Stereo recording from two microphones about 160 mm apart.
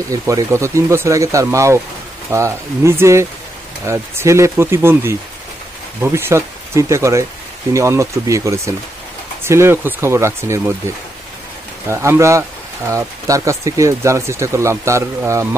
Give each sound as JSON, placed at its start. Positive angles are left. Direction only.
{"t": 0.1, "sound": "speech", "side_deg": -20}
{"t": 11.9, "sound": "speech", "side_deg": -15}